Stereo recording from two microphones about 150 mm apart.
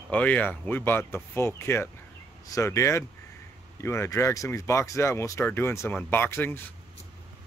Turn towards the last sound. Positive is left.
turn(degrees=15)  # may be behind; listen again after turning